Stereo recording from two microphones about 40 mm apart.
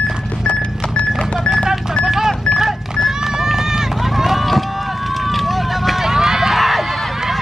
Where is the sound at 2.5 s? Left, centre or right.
Centre.